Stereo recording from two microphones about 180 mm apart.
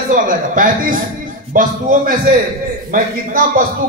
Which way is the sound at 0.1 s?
50° right (ahead or behind).